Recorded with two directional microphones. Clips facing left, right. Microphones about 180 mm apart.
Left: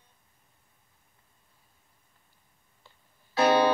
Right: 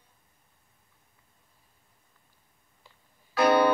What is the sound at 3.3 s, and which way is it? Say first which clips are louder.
Music: right 1 dB; 25° left (ahead or behind).